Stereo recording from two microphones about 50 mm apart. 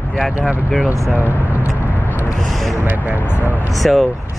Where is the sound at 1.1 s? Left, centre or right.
Right.